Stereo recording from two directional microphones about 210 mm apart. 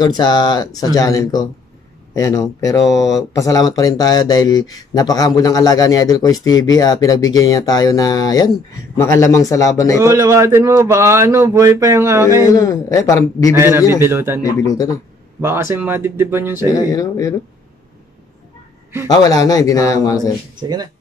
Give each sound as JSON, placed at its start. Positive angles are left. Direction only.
{"t": 0.0, "sound": "speech", "side_deg": 20}
{"t": 10.0, "sound": "a man's voice", "side_deg": -15}
{"t": 12.5, "sound": "speech", "side_deg": 15}
{"t": 13.6, "sound": "a man's voice", "side_deg": -15}
{"t": 14.4, "sound": "speech", "side_deg": 15}
{"t": 15.4, "sound": "a man's voice", "side_deg": -10}
{"t": 16.7, "sound": "speech", "side_deg": 15}
{"t": 19.0, "sound": "speech", "side_deg": 20}
{"t": 20.6, "sound": "speech", "side_deg": -20}